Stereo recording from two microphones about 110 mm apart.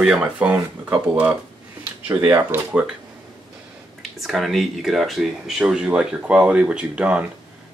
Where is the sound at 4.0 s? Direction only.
Centre (ahead or behind).